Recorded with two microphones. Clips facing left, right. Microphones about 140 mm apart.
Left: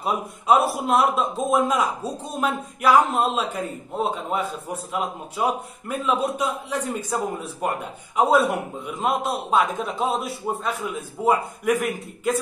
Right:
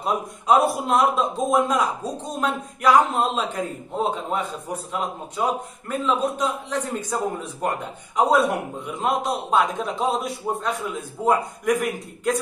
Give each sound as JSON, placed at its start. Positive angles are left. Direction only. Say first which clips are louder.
{"t": 0.0, "sound": "a man's voice", "louder": "right 1 dB", "side_deg": 5}